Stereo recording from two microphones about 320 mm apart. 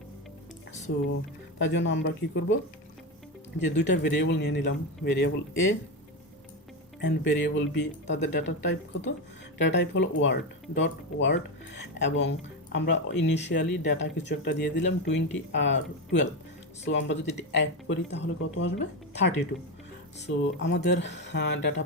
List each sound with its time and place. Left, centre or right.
0.9 s speech: left
3.6 s speech: left
7.0 s speech: left
16.8 s speech: left